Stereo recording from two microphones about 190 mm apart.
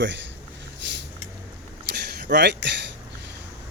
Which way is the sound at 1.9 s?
60° right (ahead or behind).